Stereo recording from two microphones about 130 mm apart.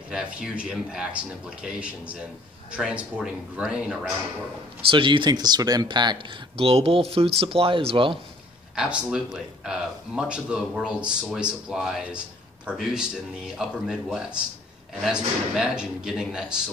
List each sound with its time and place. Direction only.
0.1 s speech: 10° right (ahead or behind)
4.9 s speech: 40° right (ahead or behind)
8.7 s speech: 5° right (ahead or behind)